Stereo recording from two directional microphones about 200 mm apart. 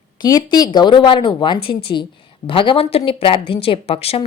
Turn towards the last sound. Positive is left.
turn(degrees=30)  # may be behind; listen again after turning